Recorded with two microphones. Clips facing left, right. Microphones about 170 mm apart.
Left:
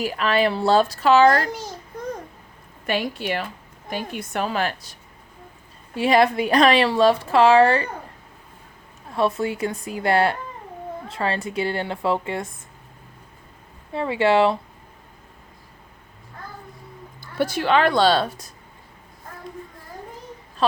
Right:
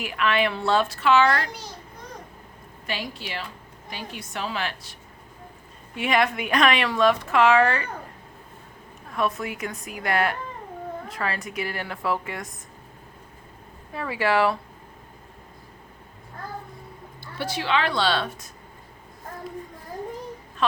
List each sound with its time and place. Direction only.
0.0 s speech: 35° left (ahead or behind)
2.8 s a woman's voice: 55° left (ahead or behind); by 7.9 s 30° left (ahead or behind)
9.1 s a woman's voice: 30° left (ahead or behind)
13.9 s a woman's voice: 25° left (ahead or behind)
17.3 s a woman's voice: 50° left (ahead or behind)
20.6 s speech: 35° left (ahead or behind)